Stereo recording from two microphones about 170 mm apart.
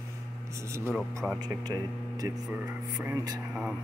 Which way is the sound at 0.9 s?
Centre (ahead or behind).